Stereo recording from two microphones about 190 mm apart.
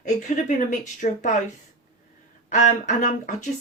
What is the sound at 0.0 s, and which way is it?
Speech, 40° left (ahead or behind).